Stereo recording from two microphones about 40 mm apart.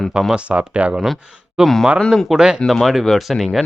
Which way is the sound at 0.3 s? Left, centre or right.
Right.